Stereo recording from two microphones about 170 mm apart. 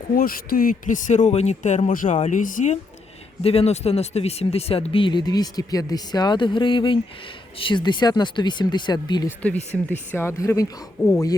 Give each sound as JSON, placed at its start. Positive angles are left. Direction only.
{"t": 0.2, "sound": "speech", "side_deg": 60}
{"t": 3.4, "sound": "speech", "side_deg": 35}
{"t": 9.7, "sound": "speech", "side_deg": 0}
{"t": 10.1, "sound": "speech", "side_deg": 15}